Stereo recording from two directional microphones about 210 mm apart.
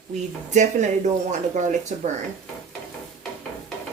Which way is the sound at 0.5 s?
35° right (ahead or behind).